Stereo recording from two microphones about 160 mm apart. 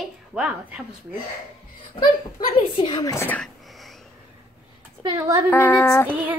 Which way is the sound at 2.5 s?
35° left (ahead or behind).